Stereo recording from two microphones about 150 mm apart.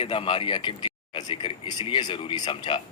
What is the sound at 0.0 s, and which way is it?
A man's voice, 40° left (ahead or behind).